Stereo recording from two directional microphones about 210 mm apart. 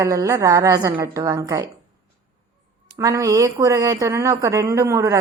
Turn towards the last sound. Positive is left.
turn(degrees=-15)  # may be behind; listen again after turning